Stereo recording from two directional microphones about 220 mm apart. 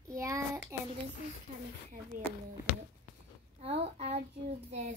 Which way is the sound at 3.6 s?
25° right (ahead or behind).